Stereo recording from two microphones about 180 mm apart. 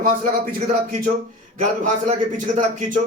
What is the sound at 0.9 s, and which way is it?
Speech, 50° right (ahead or behind).